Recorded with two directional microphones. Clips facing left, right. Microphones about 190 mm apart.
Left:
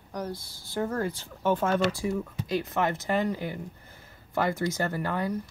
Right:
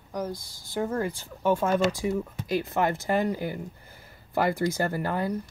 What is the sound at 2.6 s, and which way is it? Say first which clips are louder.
Speech: right 2 dB; 30° right (ahead or behind).